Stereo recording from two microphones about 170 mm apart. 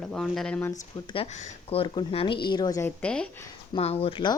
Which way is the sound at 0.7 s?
30° left (ahead or behind).